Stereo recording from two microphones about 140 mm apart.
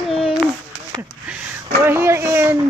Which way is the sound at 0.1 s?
Centre (ahead or behind).